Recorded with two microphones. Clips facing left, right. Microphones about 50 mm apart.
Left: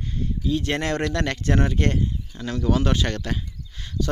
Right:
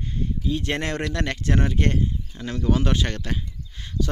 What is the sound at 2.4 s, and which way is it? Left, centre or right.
Speech, centre.